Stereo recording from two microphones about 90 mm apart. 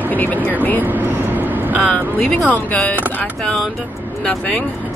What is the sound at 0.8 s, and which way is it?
Vehicle, 20° right (ahead or behind).